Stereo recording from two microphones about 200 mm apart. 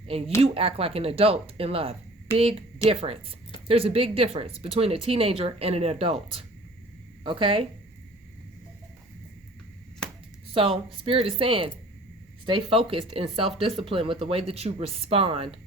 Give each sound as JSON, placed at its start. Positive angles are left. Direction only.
{"t": 0.0, "sound": "speech", "side_deg": -30}
{"t": 10.0, "sound": "a sound", "side_deg": 5}
{"t": 10.5, "sound": "speech", "side_deg": -25}